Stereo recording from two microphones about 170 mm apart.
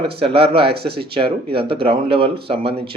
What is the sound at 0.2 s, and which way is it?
Speech, 35° right (ahead or behind).